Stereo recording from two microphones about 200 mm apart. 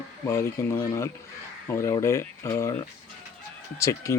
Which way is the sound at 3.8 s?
15° left (ahead or behind).